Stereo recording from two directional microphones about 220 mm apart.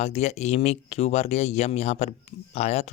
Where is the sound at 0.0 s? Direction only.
30° left (ahead or behind).